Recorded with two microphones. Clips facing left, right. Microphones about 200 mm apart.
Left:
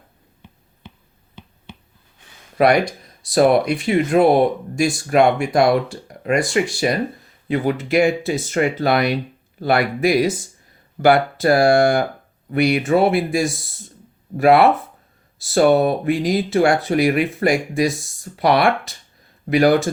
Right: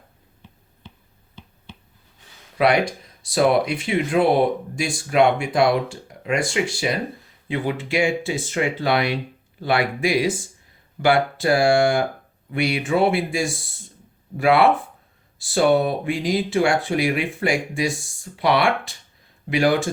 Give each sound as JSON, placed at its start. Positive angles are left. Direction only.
{"t": 2.6, "sound": "speech", "side_deg": 40}